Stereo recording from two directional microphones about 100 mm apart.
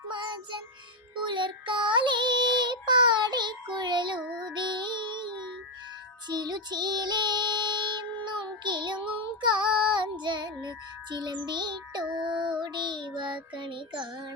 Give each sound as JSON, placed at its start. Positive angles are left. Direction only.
{"t": 1.2, "sound": "child singing", "side_deg": -55}
{"t": 4.2, "sound": "child singing", "side_deg": -10}
{"t": 4.5, "sound": "music", "side_deg": -50}
{"t": 6.2, "sound": "child singing", "side_deg": -45}
{"t": 12.3, "sound": "child singing", "side_deg": -5}
{"t": 12.5, "sound": "child singing", "side_deg": -45}